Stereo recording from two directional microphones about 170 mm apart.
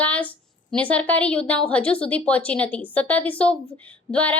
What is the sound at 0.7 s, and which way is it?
A woman's voice, 10° left (ahead or behind).